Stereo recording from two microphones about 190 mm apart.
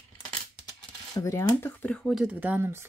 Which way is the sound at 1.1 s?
15° left (ahead or behind).